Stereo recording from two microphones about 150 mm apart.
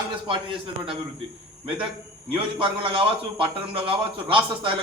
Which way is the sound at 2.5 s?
35° right (ahead or behind).